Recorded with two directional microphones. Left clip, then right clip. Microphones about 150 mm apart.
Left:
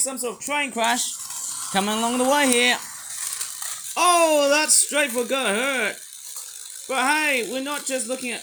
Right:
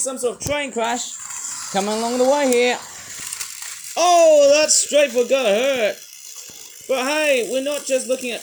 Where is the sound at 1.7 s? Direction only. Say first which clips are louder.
Right 2 dB; 90° left.